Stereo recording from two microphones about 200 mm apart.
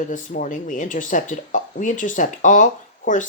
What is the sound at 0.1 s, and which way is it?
Speech, 40° left (ahead or behind).